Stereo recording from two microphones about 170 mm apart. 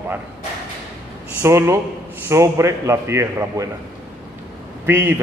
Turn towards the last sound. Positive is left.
turn(degrees=-15)  # may be behind; listen again after turning